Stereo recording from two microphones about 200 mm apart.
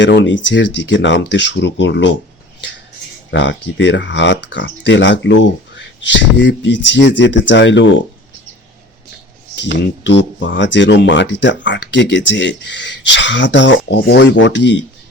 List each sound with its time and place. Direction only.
0.0 s speech: 65° left (ahead or behind)
3.3 s speech: 65° left (ahead or behind)
9.6 s speech: 60° left (ahead or behind)